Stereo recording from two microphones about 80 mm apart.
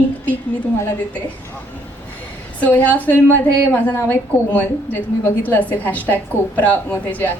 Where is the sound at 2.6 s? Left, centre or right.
Left.